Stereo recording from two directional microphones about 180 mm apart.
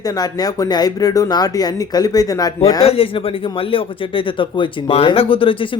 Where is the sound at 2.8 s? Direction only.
30° left (ahead or behind).